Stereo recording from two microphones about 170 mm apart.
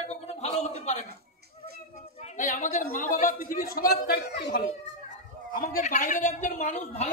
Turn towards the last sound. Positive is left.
turn(degrees=40)  # may be behind; listen again after turning